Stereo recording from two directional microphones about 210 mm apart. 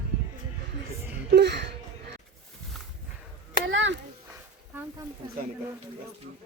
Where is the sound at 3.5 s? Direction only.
60° right (ahead or behind).